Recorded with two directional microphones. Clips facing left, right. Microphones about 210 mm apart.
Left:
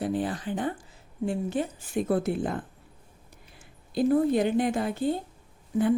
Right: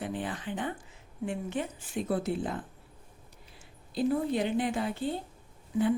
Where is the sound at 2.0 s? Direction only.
50° left (ahead or behind).